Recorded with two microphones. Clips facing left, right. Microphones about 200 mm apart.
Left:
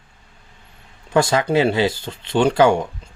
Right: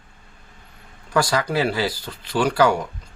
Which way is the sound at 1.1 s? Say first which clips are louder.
Left 4 dB; 25° left (ahead or behind).